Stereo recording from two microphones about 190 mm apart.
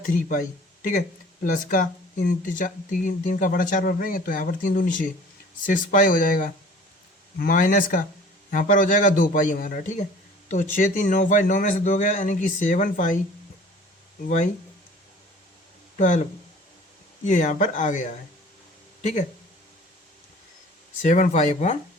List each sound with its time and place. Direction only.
0.0 s a man's voice: 45° left (ahead or behind)
16.0 s speech: 40° left (ahead or behind)
17.2 s a man's voice: 40° left (ahead or behind)
21.0 s a man's voice: 40° left (ahead or behind)